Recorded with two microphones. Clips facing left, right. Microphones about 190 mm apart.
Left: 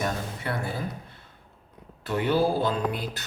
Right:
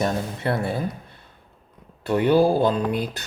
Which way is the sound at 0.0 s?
30° right (ahead or behind).